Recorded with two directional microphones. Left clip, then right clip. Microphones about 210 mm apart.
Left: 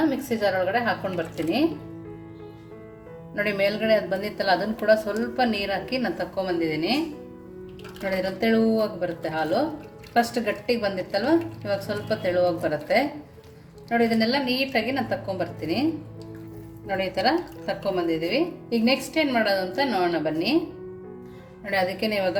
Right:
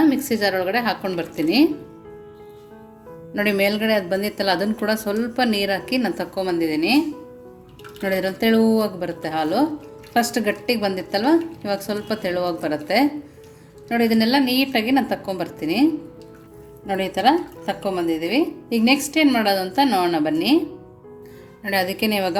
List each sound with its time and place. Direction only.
0.1 s speech: 45° right (ahead or behind)
3.3 s speech: 45° right (ahead or behind)
8.0 s speech: 50° right (ahead or behind)
16.8 s speech: 55° right (ahead or behind)
21.7 s speech: 45° right (ahead or behind)